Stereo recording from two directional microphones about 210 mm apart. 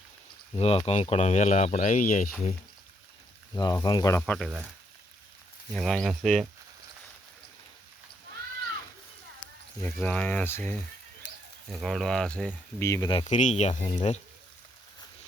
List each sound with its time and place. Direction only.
0.5 s speech: 30° left (ahead or behind)
3.5 s speech: 15° left (ahead or behind)
4.2 s speech: centre (ahead or behind)
5.7 s speech: centre (ahead or behind)
9.8 s speech: 5° left (ahead or behind)
13.2 s speech: 35° left (ahead or behind)